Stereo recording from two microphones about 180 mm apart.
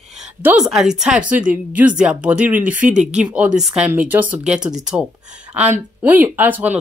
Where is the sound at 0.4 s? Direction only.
5° right (ahead or behind).